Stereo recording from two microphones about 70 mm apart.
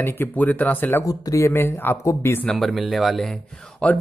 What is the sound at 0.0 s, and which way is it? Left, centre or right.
Speech, left.